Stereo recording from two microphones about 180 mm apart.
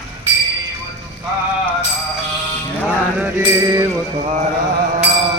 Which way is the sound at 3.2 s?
15° right (ahead or behind).